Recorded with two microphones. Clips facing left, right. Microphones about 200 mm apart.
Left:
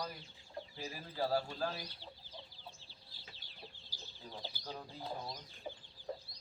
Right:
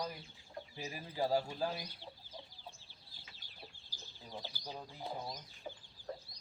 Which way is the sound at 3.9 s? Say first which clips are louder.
Right 1 dB; 15° right (ahead or behind).